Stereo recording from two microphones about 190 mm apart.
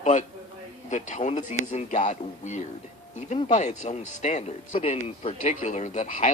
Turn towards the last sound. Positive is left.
turn(degrees=40)  # may be behind; listen again after turning